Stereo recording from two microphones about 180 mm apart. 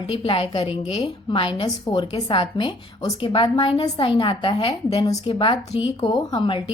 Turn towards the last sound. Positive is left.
turn(degrees=25)  # may be behind; listen again after turning